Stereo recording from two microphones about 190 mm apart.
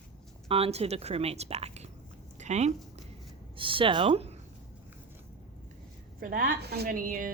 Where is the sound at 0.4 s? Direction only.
30° right (ahead or behind).